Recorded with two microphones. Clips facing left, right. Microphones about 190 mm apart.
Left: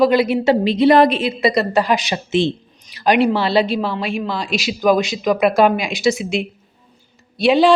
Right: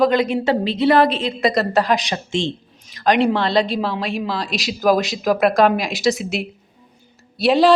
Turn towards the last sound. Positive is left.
turn(degrees=0)  # may be behind; listen again after turning